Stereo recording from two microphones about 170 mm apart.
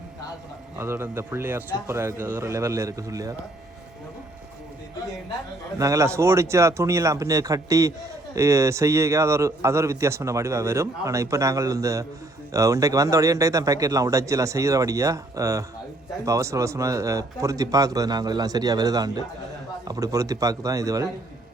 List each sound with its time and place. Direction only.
0.8 s a man's voice: 15° right (ahead or behind)
5.8 s a man's voice: 20° right (ahead or behind)